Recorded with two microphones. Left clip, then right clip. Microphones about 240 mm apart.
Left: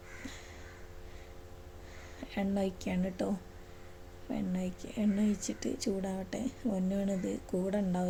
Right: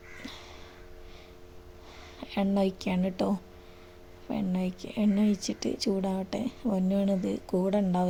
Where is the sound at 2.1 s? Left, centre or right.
Right.